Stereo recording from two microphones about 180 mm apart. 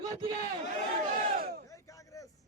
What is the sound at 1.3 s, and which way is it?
Battle cry, 55° right (ahead or behind).